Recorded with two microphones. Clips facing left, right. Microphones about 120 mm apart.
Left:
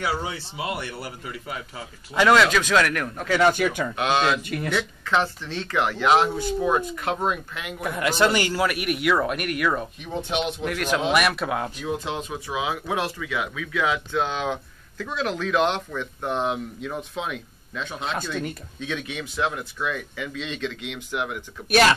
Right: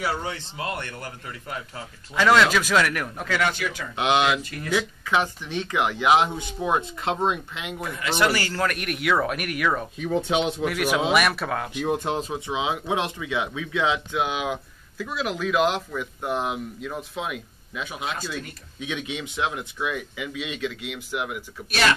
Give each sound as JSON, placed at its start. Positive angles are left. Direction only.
{"t": 0.2, "sound": "speech", "side_deg": 10}
{"t": 3.4, "sound": "speech", "side_deg": 50}
{"t": 3.9, "sound": "speech", "side_deg": -20}
{"t": 4.4, "sound": "speech", "side_deg": 60}
{"t": 4.7, "sound": "speech", "side_deg": -10}
{"t": 8.2, "sound": "speech", "side_deg": 20}
{"t": 11.8, "sound": "speech", "side_deg": -50}
{"t": 12.2, "sound": "speech", "side_deg": -25}